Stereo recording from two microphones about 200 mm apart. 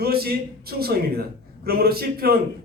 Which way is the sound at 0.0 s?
50° right (ahead or behind).